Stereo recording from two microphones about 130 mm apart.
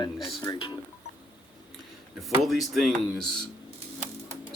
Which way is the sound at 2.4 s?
Centre (ahead or behind).